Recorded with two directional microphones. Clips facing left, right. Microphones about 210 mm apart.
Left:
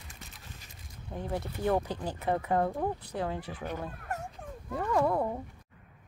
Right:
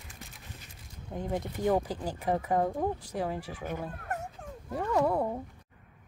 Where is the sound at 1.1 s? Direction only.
15° right (ahead or behind).